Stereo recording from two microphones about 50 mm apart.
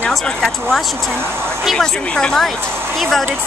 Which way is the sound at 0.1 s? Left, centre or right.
Centre.